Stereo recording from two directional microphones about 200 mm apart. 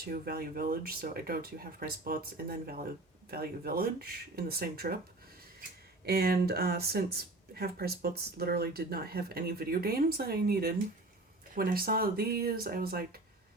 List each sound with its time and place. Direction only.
0.0 s speech: 50° right (ahead or behind)
6.1 s speech: 50° right (ahead or behind)